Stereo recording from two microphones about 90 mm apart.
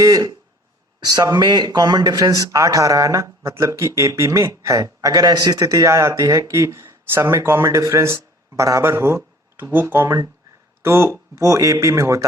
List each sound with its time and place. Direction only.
0.0 s speech: 40° right (ahead or behind)